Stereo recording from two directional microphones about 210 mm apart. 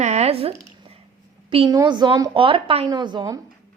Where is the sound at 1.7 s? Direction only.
20° right (ahead or behind).